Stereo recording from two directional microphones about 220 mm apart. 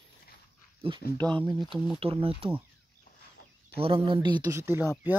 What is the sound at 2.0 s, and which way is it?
Speech, 25° right (ahead or behind).